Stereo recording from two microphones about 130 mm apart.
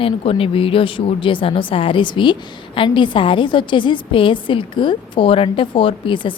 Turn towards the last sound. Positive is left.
turn(degrees=40)  # may be behind; listen again after turning